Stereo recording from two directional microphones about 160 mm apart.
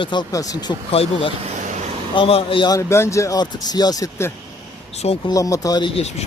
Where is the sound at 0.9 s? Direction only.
40° left (ahead or behind); by 4.3 s 20° left (ahead or behind).